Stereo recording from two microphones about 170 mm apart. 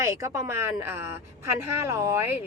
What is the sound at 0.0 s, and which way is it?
Speech, 15° right (ahead or behind).